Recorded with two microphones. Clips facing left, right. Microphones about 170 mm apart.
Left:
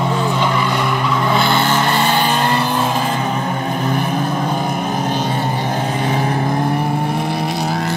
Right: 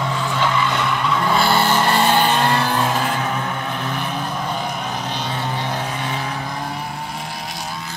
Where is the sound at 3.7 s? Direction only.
45° left (ahead or behind).